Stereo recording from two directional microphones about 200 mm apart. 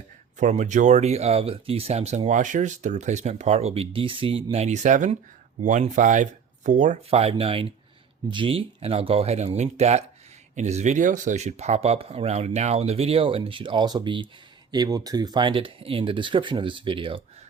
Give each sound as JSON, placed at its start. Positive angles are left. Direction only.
{"t": 0.3, "sound": "speech", "side_deg": -35}